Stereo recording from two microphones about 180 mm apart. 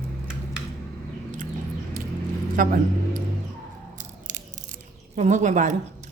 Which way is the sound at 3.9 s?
45° right (ahead or behind).